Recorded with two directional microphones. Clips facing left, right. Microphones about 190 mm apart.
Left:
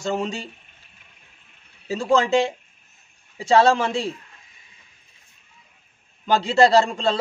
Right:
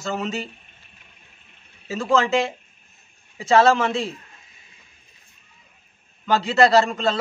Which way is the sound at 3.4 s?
30° left (ahead or behind).